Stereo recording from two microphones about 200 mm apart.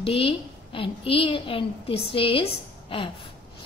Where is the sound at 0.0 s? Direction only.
30° left (ahead or behind).